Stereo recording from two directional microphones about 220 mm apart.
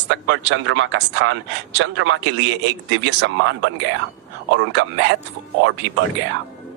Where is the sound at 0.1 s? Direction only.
55° right (ahead or behind).